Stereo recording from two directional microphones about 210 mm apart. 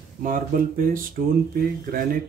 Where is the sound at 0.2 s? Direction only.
40° right (ahead or behind).